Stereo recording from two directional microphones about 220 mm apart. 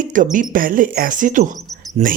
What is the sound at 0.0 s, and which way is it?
Speech, 35° right (ahead or behind).